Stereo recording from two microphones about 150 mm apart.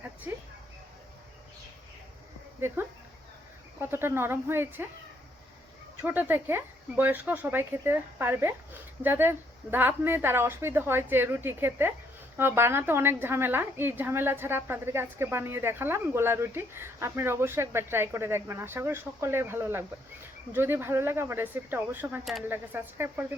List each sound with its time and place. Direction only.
0.0 s a sound: 10° right (ahead or behind)
2.6 s a woman's voice: 15° right (ahead or behind)
6.0 s a woman's voice: 15° right (ahead or behind)
22.2 s speech: centre (ahead or behind)
22.4 s a woman's voice: 15° right (ahead or behind)